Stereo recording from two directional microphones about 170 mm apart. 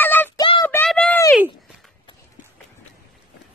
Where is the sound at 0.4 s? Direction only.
30° left (ahead or behind).